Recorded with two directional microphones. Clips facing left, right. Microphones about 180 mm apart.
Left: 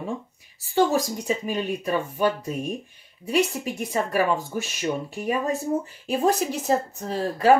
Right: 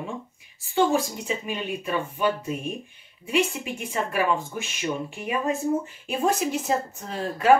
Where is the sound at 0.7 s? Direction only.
40° left (ahead or behind).